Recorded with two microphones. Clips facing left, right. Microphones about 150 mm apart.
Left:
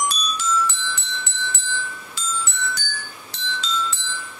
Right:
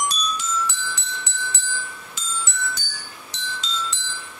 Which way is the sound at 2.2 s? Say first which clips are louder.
Left 7 dB; 20° right (ahead or behind).